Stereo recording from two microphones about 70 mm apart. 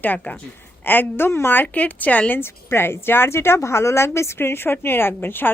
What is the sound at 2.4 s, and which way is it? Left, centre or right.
A woman's voice, left.